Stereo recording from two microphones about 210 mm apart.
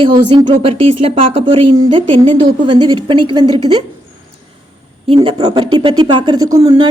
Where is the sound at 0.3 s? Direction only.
25° right (ahead or behind).